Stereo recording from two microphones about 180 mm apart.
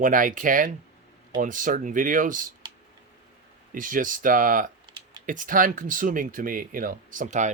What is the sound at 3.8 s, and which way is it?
Speech, 50° right (ahead or behind).